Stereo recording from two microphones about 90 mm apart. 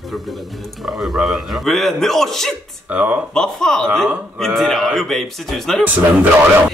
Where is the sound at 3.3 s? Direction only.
10° left (ahead or behind).